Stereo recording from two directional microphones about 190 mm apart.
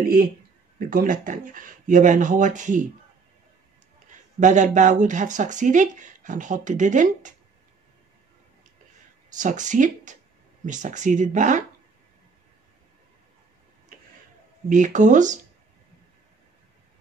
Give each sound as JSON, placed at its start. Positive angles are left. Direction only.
{"t": 0.7, "sound": "speech", "side_deg": -45}
{"t": 4.4, "sound": "speech", "side_deg": -40}
{"t": 9.4, "sound": "speech", "side_deg": -40}
{"t": 14.7, "sound": "speech", "side_deg": -40}